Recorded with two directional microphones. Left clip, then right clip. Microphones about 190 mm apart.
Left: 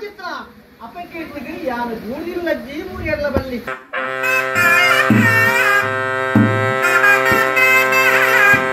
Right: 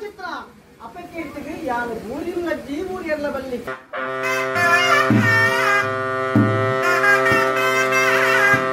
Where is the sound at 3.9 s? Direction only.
20° left (ahead or behind).